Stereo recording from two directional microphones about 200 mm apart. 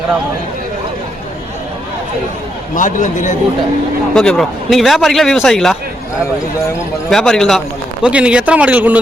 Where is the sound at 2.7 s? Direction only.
40° left (ahead or behind).